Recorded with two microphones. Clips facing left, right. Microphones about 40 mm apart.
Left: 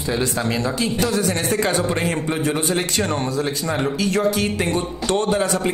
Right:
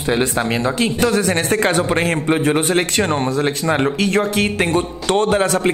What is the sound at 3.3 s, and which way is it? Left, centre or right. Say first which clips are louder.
A man's voice: right 5 dB; right.